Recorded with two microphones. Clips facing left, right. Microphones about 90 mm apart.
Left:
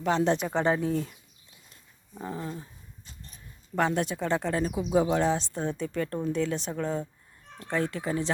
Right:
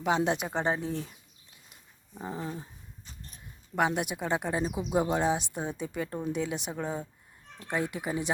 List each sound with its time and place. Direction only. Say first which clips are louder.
0.0 s speech: left 2 dB; 10° right (ahead or behind)
2.2 s a sound: left 1 dB; 20° right (ahead or behind)
3.8 s speech: left 2 dB; 10° right (ahead or behind)